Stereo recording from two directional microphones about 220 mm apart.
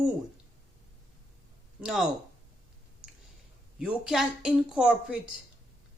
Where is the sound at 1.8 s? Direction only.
Centre (ahead or behind).